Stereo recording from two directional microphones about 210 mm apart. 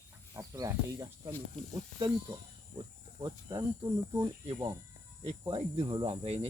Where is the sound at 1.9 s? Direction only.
20° right (ahead or behind).